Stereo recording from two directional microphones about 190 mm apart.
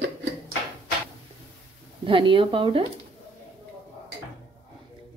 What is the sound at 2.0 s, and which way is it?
Speech, 25° right (ahead or behind).